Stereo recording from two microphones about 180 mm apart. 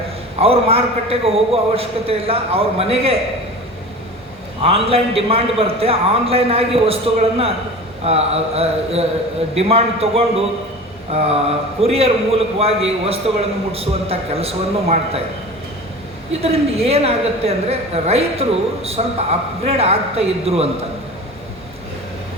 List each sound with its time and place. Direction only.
0.3 s a woman's voice: 35° right (ahead or behind)
4.6 s a woman's voice: 35° right (ahead or behind)
16.3 s a woman's voice: 35° right (ahead or behind)